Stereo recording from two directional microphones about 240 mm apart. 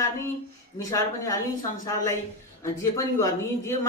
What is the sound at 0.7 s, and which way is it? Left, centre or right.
Speech, centre.